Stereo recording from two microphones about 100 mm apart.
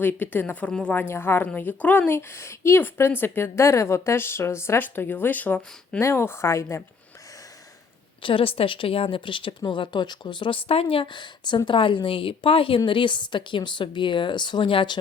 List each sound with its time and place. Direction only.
0.0 s speech: 20° left (ahead or behind)
6.0 s speech: 25° left (ahead or behind)
8.2 s speech: 60° left (ahead or behind)
10.7 s a woman's voice: 70° left (ahead or behind); by 14.9 s 55° left (ahead or behind)